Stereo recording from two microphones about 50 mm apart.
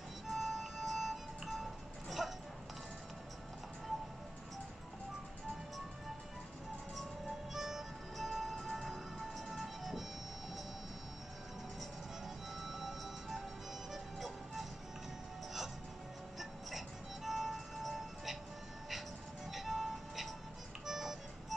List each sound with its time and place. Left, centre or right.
0.3 s music: centre
7.5 s music: centre
12.6 s music: centre
16.3 s music: centre
19.5 s music: centre